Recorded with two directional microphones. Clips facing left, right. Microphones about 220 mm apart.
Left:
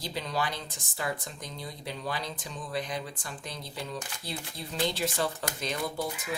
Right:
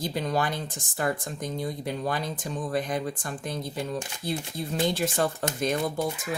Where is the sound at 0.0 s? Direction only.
50° right (ahead or behind).